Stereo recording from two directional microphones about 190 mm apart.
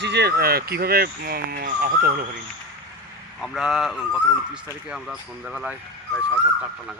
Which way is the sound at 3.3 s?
Centre (ahead or behind).